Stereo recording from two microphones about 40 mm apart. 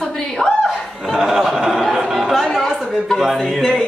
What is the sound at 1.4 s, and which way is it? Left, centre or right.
A man's voice, centre.